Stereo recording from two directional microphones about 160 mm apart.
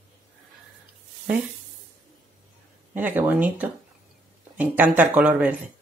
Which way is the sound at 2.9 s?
10° right (ahead or behind).